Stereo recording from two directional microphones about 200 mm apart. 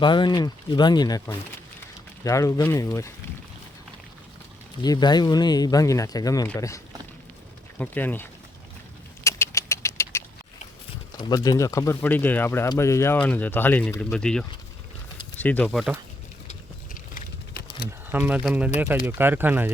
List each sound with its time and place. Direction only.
0.0 s speech: 25° left (ahead or behind)
4.8 s speech: 20° left (ahead or behind)
9.2 s a sound: 15° left (ahead or behind)
11.2 s speech: 20° left (ahead or behind); by 16.0 s centre (ahead or behind)
16.5 s a sound: 45° left (ahead or behind)
18.1 s speech: 10° right (ahead or behind)